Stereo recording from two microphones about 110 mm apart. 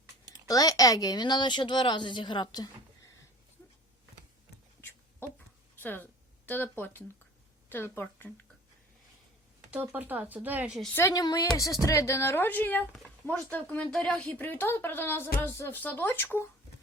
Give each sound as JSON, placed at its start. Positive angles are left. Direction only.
{"t": 0.4, "sound": "a woman's voice", "side_deg": 35}
{"t": 4.8, "sound": "a sound", "side_deg": 20}
{"t": 5.8, "sound": "speech", "side_deg": 15}
{"t": 9.9, "sound": "speech", "side_deg": -15}
{"t": 10.9, "sound": "a woman's voice", "side_deg": 30}